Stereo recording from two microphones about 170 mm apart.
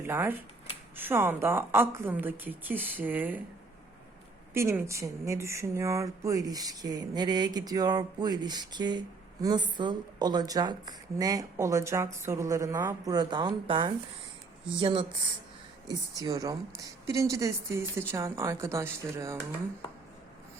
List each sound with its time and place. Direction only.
0.0 s a woman's voice: 10° right (ahead or behind)
4.5 s a woman's voice: 15° right (ahead or behind)